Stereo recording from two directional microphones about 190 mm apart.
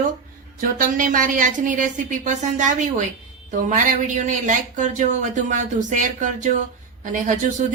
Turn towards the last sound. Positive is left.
turn(degrees=-40)  # may be behind; listen again after turning